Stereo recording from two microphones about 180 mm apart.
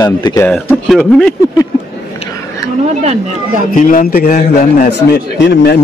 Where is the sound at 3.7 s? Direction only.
50° left (ahead or behind).